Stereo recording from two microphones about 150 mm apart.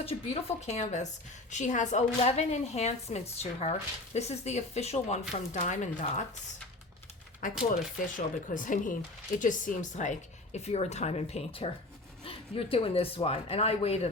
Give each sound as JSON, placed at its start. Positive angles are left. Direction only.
{"t": 0.0, "sound": "a woman's voice", "side_deg": 40}
{"t": 7.4, "sound": "a woman's voice", "side_deg": 60}